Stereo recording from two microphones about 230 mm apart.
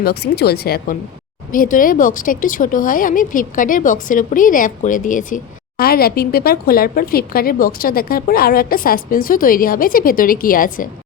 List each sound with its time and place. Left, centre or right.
0.0 s a woman's voice: left